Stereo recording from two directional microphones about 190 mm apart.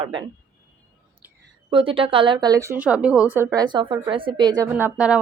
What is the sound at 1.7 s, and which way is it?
Speech, 25° right (ahead or behind).